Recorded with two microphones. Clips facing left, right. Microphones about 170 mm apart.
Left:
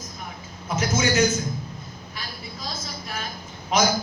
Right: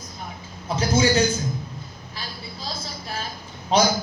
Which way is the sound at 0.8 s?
30° right (ahead or behind).